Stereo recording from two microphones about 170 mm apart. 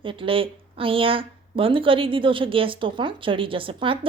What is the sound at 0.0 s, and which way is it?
A woman's voice, 30° right (ahead or behind).